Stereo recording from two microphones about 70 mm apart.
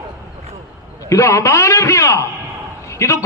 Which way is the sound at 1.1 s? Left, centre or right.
Left.